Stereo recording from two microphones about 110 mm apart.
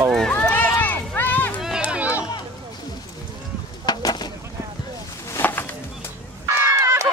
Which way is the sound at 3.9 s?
40° left (ahead or behind).